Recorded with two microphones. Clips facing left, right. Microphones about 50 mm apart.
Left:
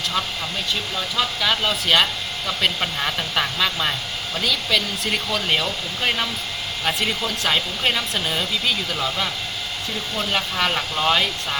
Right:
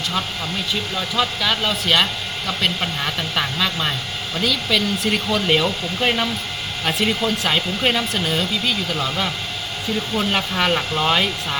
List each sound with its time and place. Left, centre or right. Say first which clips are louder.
0.9 s speech: right 3 dB; centre